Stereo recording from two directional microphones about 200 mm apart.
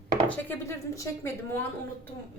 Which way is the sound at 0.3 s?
10° left (ahead or behind).